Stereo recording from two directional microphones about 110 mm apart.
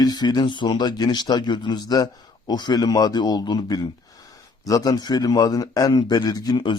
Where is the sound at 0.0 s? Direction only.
40° left (ahead or behind).